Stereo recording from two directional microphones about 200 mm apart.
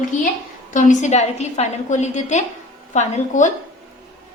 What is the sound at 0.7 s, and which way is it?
A woman's voice, 40° left (ahead or behind).